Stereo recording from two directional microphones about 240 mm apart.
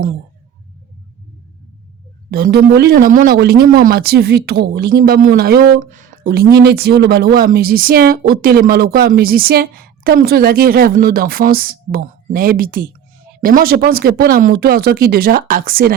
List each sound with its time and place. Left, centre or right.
2.3 s speech: right